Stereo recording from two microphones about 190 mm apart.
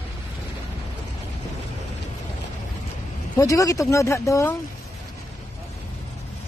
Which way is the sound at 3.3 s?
20° left (ahead or behind).